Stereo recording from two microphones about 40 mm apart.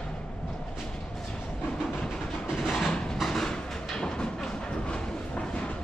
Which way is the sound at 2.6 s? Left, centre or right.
Centre.